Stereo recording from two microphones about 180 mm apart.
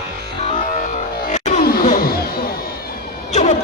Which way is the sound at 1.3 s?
40° left (ahead or behind).